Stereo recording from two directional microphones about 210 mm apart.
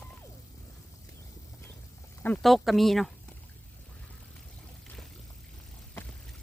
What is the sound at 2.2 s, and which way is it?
Speech, 5° left (ahead or behind).